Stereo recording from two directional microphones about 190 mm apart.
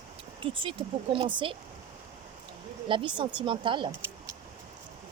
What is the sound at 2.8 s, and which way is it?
Speech, 25° right (ahead or behind).